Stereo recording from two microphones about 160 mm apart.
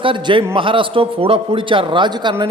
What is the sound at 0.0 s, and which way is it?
A man's voice, 30° right (ahead or behind).